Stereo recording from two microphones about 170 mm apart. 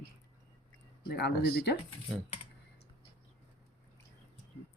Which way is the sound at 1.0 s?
75° left (ahead or behind).